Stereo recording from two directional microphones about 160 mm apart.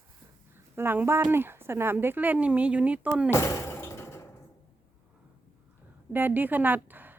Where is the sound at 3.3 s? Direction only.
20° left (ahead or behind).